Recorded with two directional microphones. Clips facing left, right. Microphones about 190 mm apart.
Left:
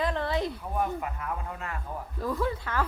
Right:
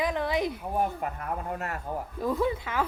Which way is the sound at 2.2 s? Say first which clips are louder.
Right 2 dB; 20° right (ahead or behind).